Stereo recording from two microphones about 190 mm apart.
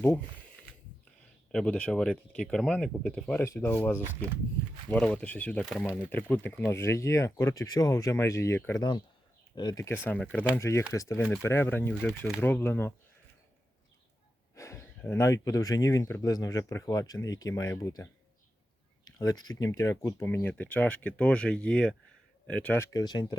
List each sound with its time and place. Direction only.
0.0 s speech: 10° left (ahead or behind)
5.6 s speech: 5° right (ahead or behind)
6.1 s speech: 10° left (ahead or behind)
14.5 s speech: 15° left (ahead or behind)